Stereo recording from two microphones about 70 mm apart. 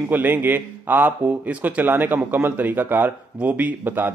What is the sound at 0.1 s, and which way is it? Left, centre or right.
Speech, right.